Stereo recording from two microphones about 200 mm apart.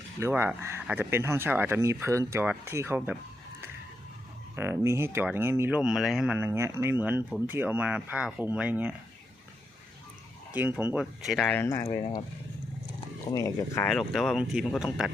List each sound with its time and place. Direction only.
0.2 s speech: 10° right (ahead or behind)
4.5 s speech: 10° right (ahead or behind)
10.5 s speech: 10° right (ahead or behind); by 11.9 s 15° left (ahead or behind)
13.3 s speech: 15° left (ahead or behind)
13.8 s speech: centre (ahead or behind)